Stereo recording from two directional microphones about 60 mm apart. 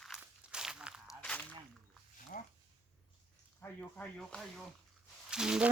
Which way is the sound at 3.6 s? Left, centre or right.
Left.